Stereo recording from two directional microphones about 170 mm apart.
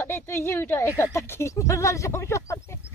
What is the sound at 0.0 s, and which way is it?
Speech, 15° left (ahead or behind).